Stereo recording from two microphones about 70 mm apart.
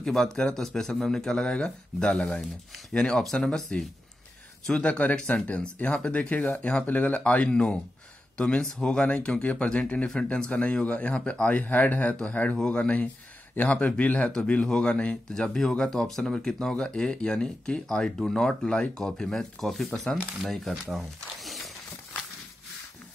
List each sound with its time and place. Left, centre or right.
0.0 s speech: centre
4.8 s speech: centre
20.4 s speech: centre
20.9 s a sound: centre